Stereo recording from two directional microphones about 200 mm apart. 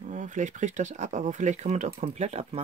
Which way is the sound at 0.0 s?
40° right (ahead or behind).